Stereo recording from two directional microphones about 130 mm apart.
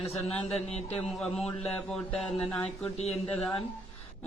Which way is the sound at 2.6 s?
55° left (ahead or behind).